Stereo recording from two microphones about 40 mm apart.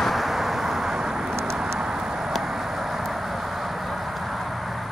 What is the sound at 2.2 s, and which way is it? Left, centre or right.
Vehicle, centre.